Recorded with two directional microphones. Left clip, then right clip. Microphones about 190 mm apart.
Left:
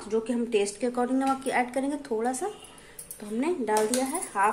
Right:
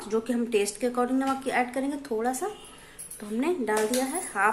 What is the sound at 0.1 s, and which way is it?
Speech, centre (ahead or behind).